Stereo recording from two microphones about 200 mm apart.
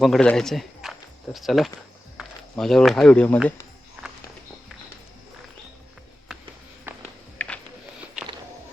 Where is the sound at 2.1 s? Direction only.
Centre (ahead or behind).